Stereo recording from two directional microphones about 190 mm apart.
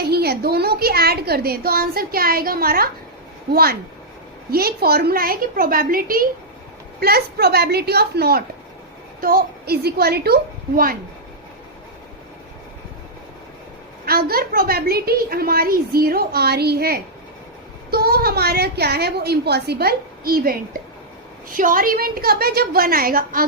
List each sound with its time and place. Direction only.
0.0 s a woman's voice: 55° right (ahead or behind)
14.0 s a woman's voice: 50° right (ahead or behind)